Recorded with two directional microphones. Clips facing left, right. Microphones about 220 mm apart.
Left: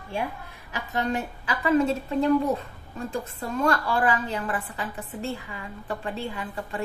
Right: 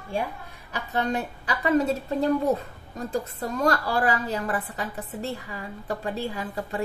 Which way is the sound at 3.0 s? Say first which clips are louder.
Right 2 dB; 40° right (ahead or behind).